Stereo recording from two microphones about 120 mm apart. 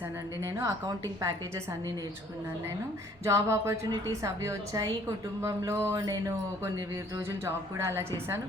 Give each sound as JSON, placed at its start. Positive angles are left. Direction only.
{"t": 0.4, "sound": "speech", "side_deg": -25}
{"t": 3.2, "sound": "speech", "side_deg": -25}